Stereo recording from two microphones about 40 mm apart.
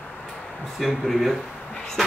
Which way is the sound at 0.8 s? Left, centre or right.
Centre.